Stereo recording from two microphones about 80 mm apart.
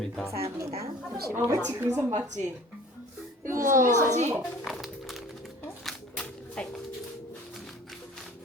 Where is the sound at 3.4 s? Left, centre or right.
Right.